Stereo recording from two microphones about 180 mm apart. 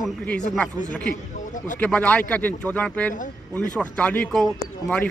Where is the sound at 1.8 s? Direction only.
5° left (ahead or behind).